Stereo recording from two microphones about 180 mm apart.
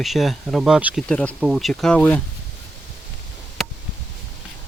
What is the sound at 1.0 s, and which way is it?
Speech, 5° left (ahead or behind).